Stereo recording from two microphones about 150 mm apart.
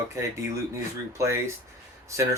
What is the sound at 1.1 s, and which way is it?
Speech, 20° right (ahead or behind).